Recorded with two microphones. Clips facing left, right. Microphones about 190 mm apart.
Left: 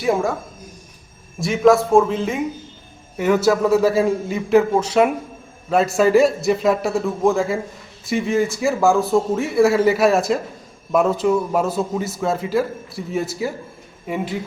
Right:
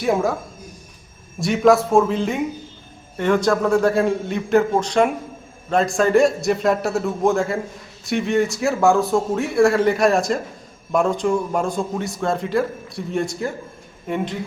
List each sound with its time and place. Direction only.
0.0 s a man's voice: centre (ahead or behind)
1.4 s a man's voice: centre (ahead or behind)